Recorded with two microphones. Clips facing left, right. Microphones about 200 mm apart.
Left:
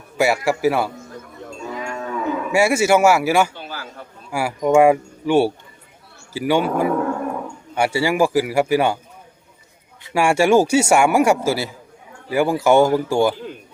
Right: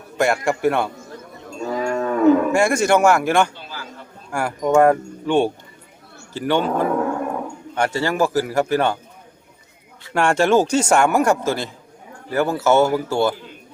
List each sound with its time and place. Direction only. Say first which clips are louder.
0.2 s a man's voice: left 1 dB; 5° left (ahead or behind)
1.7 s livestock: right 7 dB; 40° right (ahead or behind)
2.5 s speech: left 1 dB; 5° left (ahead or behind)
10.0 s speech: left 1 dB; 10° left (ahead or behind)